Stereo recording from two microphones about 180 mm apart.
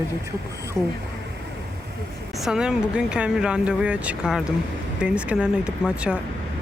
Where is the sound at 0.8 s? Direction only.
15° right (ahead or behind).